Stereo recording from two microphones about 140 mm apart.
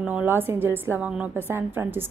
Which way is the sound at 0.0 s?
10° right (ahead or behind).